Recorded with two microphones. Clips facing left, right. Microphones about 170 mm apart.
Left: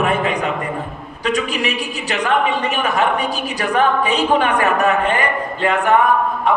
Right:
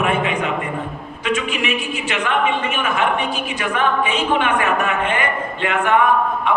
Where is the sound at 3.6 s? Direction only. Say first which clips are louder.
Left 3 dB; 40° left (ahead or behind).